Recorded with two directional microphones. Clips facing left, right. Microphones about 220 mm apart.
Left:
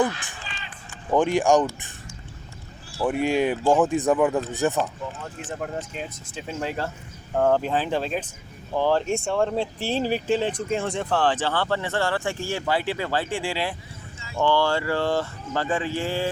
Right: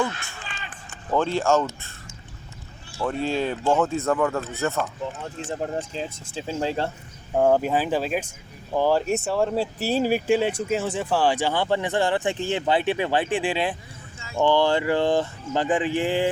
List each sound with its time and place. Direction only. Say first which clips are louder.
0.0 s speech: left 3 dB; 15° left (ahead or behind)
3.1 s speech: left 3 dB; 15° left (ahead or behind)
5.2 s speech: right 3 dB; 25° right (ahead or behind)
7.3 s speech: right 2 dB; 10° right (ahead or behind)